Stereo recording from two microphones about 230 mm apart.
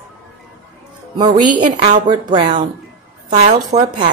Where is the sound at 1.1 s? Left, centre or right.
Centre.